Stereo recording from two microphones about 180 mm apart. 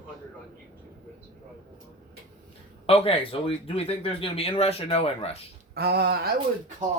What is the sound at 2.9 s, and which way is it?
Speech, 30° left (ahead or behind).